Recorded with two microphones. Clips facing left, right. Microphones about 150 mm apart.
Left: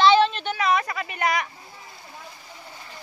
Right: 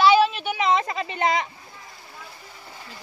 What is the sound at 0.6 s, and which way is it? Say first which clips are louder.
Speech: right 1 dB; 25° right (ahead or behind).